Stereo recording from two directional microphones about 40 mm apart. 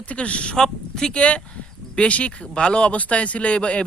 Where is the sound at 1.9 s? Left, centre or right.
Left.